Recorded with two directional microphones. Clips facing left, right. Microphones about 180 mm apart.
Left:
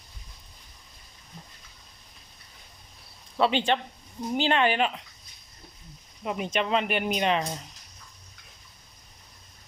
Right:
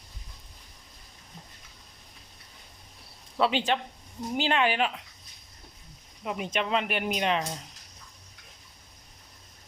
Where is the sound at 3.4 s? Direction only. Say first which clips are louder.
Left 2 dB; 5° right (ahead or behind).